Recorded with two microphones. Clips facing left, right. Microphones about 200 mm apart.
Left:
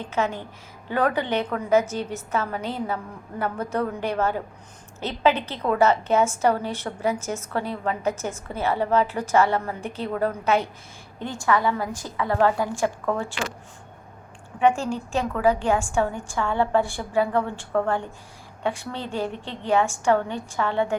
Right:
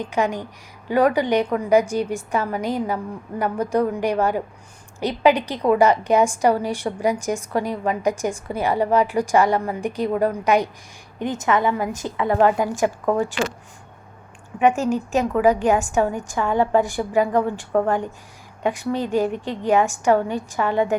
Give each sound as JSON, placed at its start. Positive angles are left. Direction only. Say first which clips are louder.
{"t": 0.0, "sound": "a woman's voice", "louder": "right 4 dB", "side_deg": -15}
{"t": 15.1, "sound": "a woman's voice", "louder": "right 3 dB", "side_deg": -15}